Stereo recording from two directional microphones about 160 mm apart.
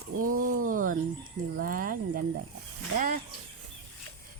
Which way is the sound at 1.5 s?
60° right (ahead or behind).